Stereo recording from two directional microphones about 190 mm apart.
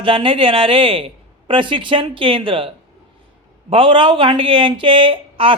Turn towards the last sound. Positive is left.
turn(degrees=-30)  # may be behind; listen again after turning